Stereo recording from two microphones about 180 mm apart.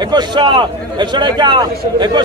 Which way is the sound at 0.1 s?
25° right (ahead or behind).